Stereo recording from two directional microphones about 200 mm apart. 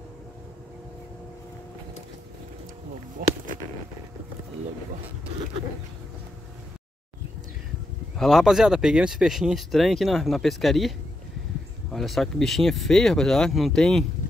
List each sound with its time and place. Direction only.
3.2 s speech: 45° right (ahead or behind)
8.2 s speech: centre (ahead or behind)